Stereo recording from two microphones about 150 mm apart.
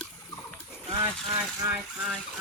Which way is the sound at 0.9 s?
35° right (ahead or behind).